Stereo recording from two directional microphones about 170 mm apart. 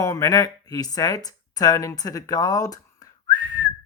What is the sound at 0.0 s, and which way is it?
Speech, 20° left (ahead or behind).